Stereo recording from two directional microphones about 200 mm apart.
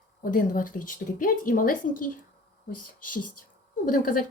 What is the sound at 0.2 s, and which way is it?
Speech, 45° left (ahead or behind).